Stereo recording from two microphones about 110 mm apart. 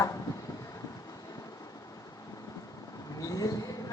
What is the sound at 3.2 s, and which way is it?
Speech, 35° left (ahead or behind).